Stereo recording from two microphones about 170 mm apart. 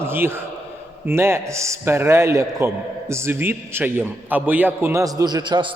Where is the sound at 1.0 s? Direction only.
15° right (ahead or behind).